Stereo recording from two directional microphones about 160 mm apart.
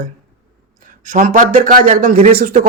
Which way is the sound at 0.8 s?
55° right (ahead or behind).